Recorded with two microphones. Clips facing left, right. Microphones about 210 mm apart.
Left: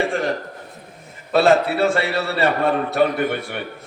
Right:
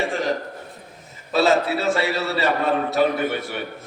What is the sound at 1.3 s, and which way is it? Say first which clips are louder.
A man's voice: left 3 dB; 55° left (ahead or behind).